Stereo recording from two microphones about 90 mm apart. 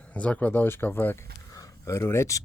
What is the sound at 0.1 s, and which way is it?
Speech, 15° left (ahead or behind).